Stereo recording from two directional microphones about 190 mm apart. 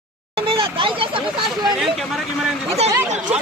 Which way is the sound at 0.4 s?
30° right (ahead or behind).